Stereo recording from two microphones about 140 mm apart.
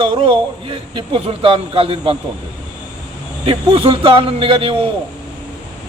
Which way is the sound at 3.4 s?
40° right (ahead or behind).